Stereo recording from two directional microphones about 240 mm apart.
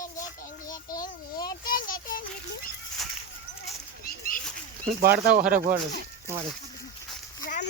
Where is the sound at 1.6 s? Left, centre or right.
Left.